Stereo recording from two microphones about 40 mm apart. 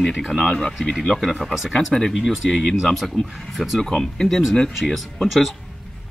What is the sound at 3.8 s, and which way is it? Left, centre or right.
Speech, centre.